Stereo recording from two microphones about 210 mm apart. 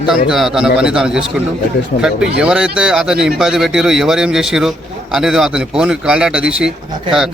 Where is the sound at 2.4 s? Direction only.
5° right (ahead or behind).